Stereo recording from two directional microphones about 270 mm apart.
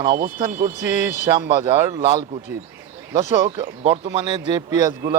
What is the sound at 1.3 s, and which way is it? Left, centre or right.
Speech, centre.